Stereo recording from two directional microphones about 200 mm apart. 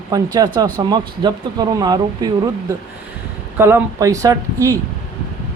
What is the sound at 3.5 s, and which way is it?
Speech, 10° right (ahead or behind).